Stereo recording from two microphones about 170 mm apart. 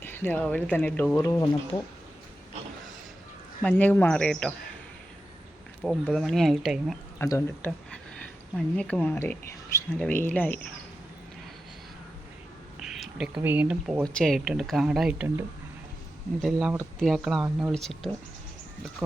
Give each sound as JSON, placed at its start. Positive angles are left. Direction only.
{"t": 0.0, "sound": "speech", "side_deg": 10}
{"t": 3.6, "sound": "speech", "side_deg": 10}
{"t": 5.8, "sound": "speech", "side_deg": 0}
{"t": 7.2, "sound": "speech", "side_deg": 15}
{"t": 7.9, "sound": "a sound", "side_deg": 5}
{"t": 9.0, "sound": "speech", "side_deg": 10}
{"t": 12.8, "sound": "speech", "side_deg": -5}
{"t": 14.1, "sound": "speech", "side_deg": 5}